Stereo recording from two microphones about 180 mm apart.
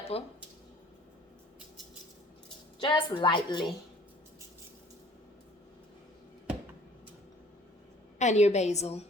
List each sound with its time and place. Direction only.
0.1 s a woman's voice: 35° left (ahead or behind)
2.8 s a woman's voice: 25° left (ahead or behind)
8.2 s a woman's voice: 40° left (ahead or behind)